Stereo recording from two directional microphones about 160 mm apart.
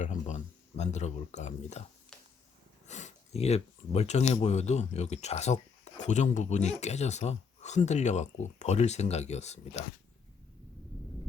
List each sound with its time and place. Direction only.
0.0 s speech: 50° left (ahead or behind)
2.8 s speech: 45° left (ahead or behind)